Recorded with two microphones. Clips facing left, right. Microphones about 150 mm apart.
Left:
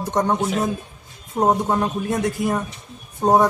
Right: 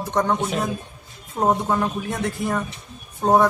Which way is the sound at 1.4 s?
15° left (ahead or behind).